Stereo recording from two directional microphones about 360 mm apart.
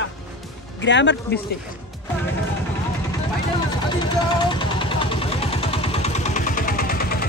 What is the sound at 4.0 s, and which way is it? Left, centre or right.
Vehicle, centre.